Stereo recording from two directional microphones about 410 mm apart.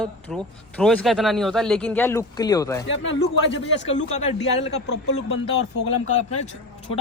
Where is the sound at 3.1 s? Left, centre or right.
Left.